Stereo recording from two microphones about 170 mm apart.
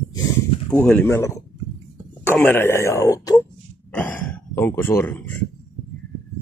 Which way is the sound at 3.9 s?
10° left (ahead or behind).